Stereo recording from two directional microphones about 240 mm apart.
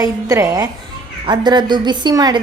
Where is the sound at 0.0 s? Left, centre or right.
Centre.